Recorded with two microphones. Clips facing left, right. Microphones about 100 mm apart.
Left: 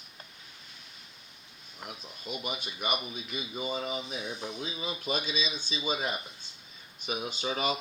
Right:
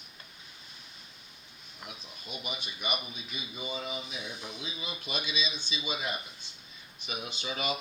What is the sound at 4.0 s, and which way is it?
Speech, 30° left (ahead or behind).